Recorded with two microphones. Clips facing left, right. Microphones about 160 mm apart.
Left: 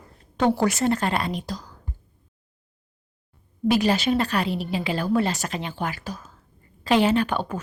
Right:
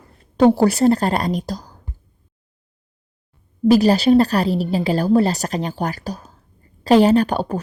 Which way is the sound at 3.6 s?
35° right (ahead or behind).